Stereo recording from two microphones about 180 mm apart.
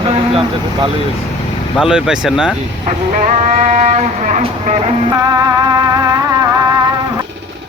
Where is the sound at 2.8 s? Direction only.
40° right (ahead or behind).